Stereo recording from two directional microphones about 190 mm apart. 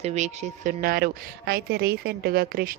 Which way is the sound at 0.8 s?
55° right (ahead or behind).